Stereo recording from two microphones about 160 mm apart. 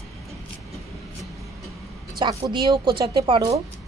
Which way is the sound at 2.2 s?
30° right (ahead or behind).